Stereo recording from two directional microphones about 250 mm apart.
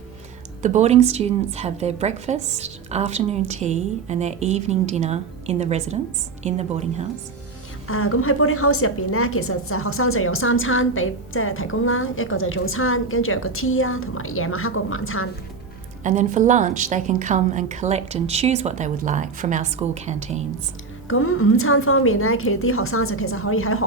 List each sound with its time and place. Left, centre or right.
0.6 s a woman's voice: right
7.9 s a woman's voice: left
16.0 s a woman's voice: right
21.1 s a woman's voice: left